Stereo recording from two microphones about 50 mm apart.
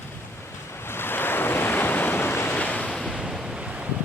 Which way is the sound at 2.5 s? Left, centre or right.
Left.